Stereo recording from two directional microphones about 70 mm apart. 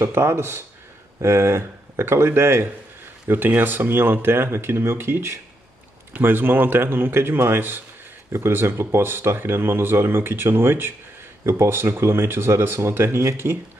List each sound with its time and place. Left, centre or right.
0.0 s speech: right